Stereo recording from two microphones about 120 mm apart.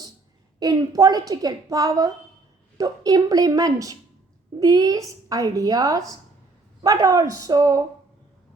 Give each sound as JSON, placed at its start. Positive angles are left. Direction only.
{"t": 0.6, "sound": "a woman's voice", "side_deg": -30}